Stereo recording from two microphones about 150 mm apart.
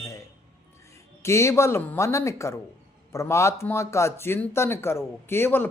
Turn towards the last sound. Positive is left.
turn(degrees=15)  # may be behind; listen again after turning